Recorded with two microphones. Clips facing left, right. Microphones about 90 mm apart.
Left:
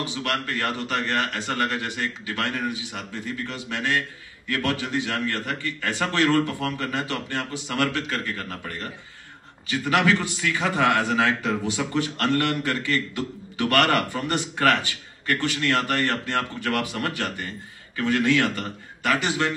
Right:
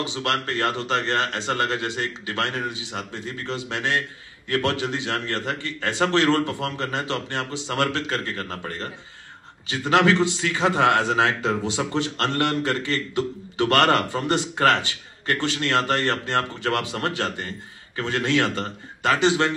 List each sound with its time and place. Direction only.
0.0 s a man's voice: 25° right (ahead or behind)